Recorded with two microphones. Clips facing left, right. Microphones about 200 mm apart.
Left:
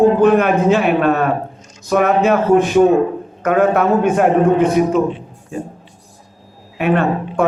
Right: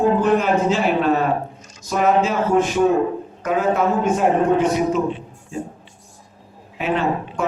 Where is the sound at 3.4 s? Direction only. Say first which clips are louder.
Left 5 dB; 60° left (ahead or behind).